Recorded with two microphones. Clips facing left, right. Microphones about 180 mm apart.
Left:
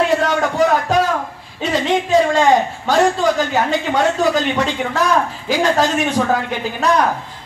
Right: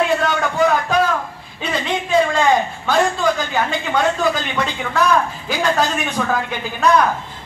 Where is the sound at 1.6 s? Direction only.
40° left (ahead or behind).